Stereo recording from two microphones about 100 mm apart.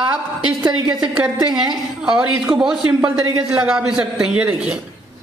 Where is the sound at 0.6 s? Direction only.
45° right (ahead or behind).